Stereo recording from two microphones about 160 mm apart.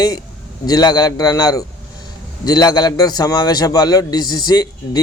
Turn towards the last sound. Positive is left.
turn(degrees=25)  # may be behind; listen again after turning